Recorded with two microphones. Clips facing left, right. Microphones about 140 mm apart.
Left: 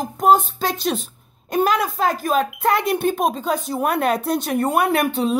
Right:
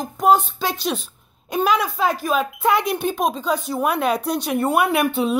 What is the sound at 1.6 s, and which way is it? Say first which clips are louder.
Speech: left 1 dB; 45° left (ahead or behind).